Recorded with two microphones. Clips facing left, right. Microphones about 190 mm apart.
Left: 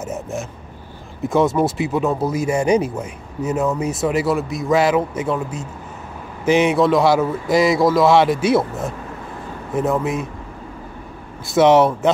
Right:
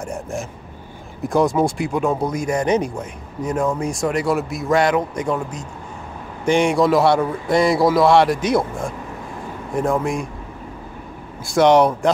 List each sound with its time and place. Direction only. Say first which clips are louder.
0.0 s a man's voice: left 1 dB; 5° left (ahead or behind)
10.0 s a man's voice: even; 5° left (ahead or behind)
11.4 s a man's voice: left 1 dB; 5° left (ahead or behind)